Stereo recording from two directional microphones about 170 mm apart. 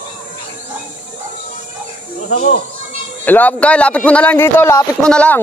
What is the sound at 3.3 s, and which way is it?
A man's voice, 10° left (ahead or behind).